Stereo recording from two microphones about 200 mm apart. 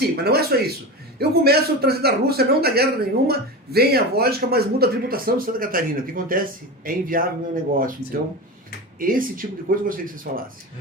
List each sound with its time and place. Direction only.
0.2 s speech: 50° right (ahead or behind)
9.0 s speech: 45° right (ahead or behind)